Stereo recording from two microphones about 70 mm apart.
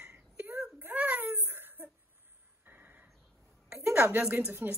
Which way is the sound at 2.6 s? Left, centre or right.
Right.